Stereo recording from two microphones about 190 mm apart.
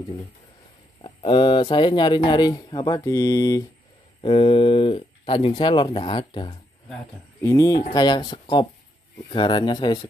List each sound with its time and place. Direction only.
1.0 s speech: 25° left (ahead or behind)
4.2 s speech: 30° left (ahead or behind)